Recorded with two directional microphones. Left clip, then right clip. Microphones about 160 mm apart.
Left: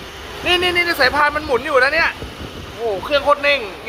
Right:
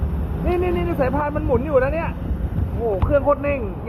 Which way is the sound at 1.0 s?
35° left (ahead or behind).